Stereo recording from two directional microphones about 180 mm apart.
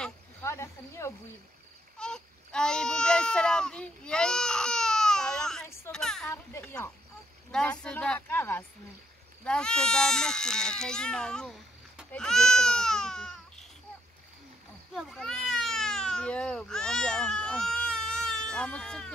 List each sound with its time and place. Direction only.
0.4 s speech: 15° left (ahead or behind)
2.0 s a sound: 5° left (ahead or behind)
6.5 s speech: 10° left (ahead or behind)
15.0 s speech: centre (ahead or behind)